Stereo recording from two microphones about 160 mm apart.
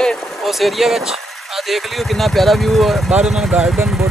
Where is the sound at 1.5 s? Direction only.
Centre (ahead or behind).